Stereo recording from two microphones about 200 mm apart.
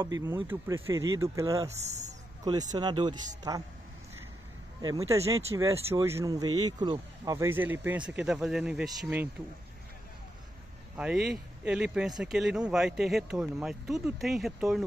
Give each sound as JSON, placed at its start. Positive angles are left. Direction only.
{"t": 0.0, "sound": "speech", "side_deg": -15}
{"t": 2.7, "sound": "speech", "side_deg": -20}
{"t": 4.8, "sound": "speech", "side_deg": -15}
{"t": 11.0, "sound": "speech", "side_deg": -5}